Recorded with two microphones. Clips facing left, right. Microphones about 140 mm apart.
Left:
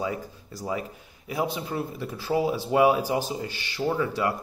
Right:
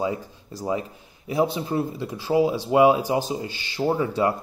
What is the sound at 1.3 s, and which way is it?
Speech, 30° right (ahead or behind).